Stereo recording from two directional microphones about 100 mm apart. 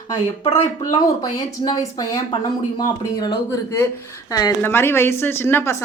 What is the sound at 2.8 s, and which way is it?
A woman's voice, 45° left (ahead or behind).